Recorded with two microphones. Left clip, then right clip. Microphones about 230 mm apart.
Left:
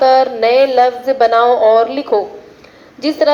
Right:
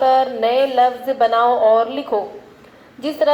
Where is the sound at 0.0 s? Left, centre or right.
Left.